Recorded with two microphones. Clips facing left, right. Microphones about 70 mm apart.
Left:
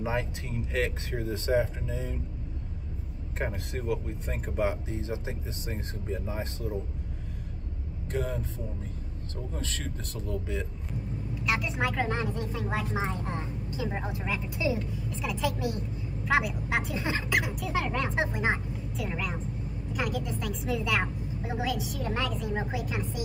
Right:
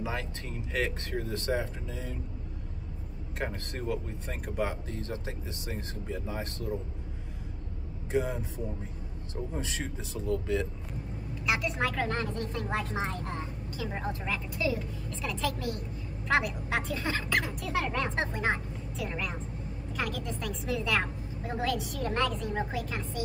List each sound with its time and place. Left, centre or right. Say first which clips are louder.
0.0 s a sound: left 4 dB; left
0.5 s speech: even; centre
1.2 s a woman's voice: left 6 dB; centre
3.4 s speech: left 3 dB; centre
4.6 s a woman's voice: left 3 dB; centre
8.1 s speech: right 2 dB; centre
9.5 s speech: right 1 dB; centre
10.1 s a woman's voice: right 5 dB; centre; by 13.8 s left
13.8 s a woman's voice: even; centre
14.5 s a woman's voice: left 1 dB; left
15.0 s a woman's voice: left 2 dB; centre
16.9 s a woman's voice: even; centre
18.9 s a woman's voice: left 1 dB; centre